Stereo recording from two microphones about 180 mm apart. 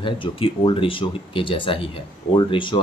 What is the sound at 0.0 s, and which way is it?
Speech, 30° left (ahead or behind).